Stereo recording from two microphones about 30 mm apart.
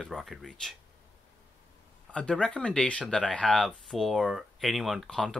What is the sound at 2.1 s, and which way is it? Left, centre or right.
Speech, left.